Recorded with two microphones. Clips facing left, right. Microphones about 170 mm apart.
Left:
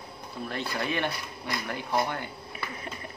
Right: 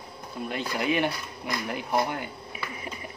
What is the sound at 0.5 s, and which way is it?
Speech, 15° right (ahead or behind).